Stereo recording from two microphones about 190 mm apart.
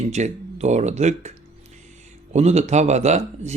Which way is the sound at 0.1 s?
35° right (ahead or behind).